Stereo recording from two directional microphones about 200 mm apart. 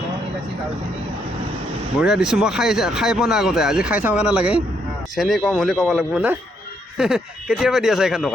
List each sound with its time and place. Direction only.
2.0 s speech: 5° right (ahead or behind)